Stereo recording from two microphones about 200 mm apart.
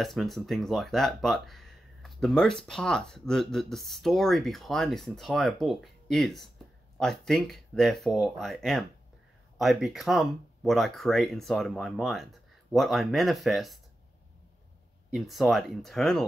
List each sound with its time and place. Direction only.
0.0 s speech: centre (ahead or behind)
15.1 s speech: centre (ahead or behind)